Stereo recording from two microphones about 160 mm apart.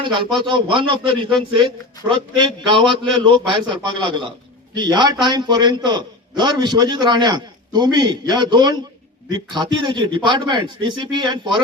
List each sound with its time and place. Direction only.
0.0 s a man's voice: 30° right (ahead or behind)